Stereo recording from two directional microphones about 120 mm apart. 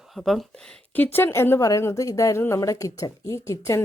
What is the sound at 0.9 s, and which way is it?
A woman's voice, 15° left (ahead or behind).